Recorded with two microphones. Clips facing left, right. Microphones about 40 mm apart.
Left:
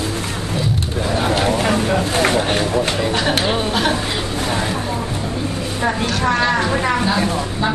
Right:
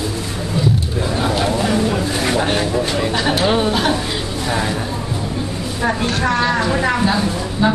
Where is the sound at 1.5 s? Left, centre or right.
Left.